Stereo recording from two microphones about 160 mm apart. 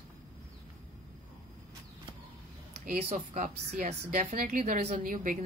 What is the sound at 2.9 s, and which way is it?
A woman's voice, 45° right (ahead or behind).